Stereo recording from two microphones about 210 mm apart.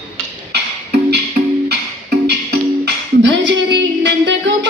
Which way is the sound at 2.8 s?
55° right (ahead or behind).